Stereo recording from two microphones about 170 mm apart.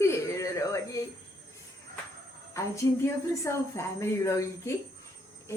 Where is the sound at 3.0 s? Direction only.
15° left (ahead or behind).